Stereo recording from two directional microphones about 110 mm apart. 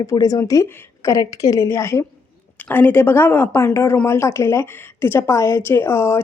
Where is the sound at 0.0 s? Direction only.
30° left (ahead or behind).